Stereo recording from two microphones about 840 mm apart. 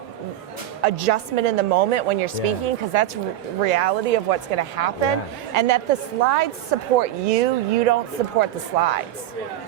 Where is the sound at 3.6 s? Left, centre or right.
Right.